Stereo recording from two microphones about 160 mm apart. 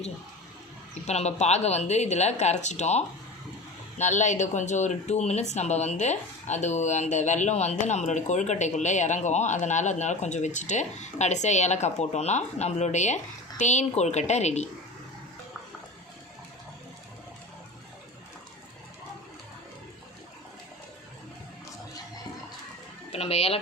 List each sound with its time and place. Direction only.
1.0 s speech: 45° left (ahead or behind)
23.1 s speech: 40° left (ahead or behind)